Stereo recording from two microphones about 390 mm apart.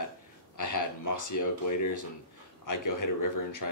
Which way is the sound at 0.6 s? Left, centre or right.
Left.